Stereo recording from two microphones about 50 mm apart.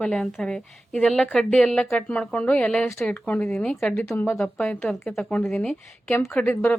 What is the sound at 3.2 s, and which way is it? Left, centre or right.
Speech, left.